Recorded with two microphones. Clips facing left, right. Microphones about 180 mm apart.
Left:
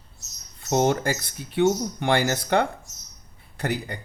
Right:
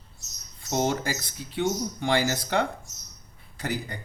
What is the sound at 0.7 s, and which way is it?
A man's voice, 55° left (ahead or behind).